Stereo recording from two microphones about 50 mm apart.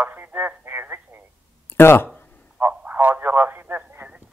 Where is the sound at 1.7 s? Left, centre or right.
Left.